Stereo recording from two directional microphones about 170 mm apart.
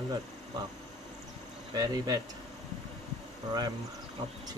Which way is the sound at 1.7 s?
25° right (ahead or behind).